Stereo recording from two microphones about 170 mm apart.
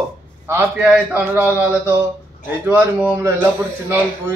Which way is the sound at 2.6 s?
10° right (ahead or behind).